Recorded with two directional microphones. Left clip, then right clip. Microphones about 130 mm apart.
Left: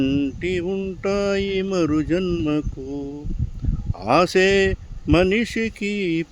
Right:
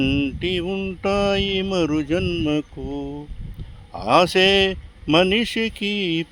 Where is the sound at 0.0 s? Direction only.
25° left (ahead or behind).